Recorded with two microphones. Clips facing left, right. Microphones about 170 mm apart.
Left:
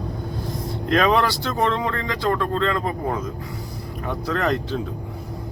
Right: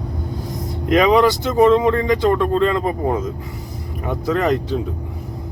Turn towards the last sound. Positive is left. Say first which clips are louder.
# right 5 dB
turn(degrees=-15)  # may be behind; listen again after turning